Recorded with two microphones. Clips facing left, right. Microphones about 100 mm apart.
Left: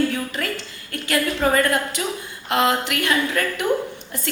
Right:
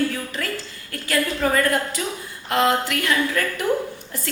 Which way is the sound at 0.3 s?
20° left (ahead or behind).